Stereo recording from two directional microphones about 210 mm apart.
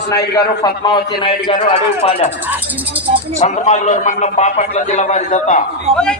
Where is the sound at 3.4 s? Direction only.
35° left (ahead or behind).